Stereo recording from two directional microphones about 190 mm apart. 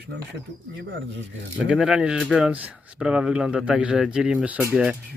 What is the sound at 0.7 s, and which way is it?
Speech, 70° right (ahead or behind).